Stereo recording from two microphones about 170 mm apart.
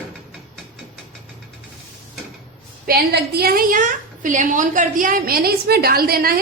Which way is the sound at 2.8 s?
70° right (ahead or behind).